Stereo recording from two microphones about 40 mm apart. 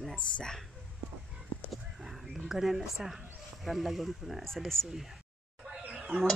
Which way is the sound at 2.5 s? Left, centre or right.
Centre.